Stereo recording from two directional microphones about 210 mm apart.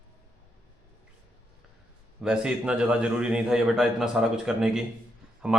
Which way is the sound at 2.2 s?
5° right (ahead or behind).